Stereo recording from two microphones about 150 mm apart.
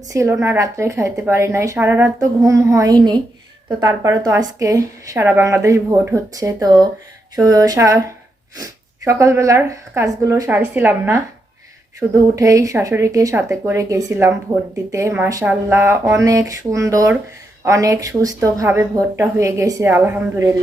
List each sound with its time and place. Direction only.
0.1 s a woman's voice: 20° right (ahead or behind)